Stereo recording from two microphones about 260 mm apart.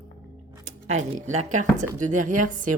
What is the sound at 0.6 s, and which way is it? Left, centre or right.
A woman's voice, right.